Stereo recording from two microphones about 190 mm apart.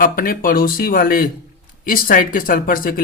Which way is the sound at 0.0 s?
50° left (ahead or behind).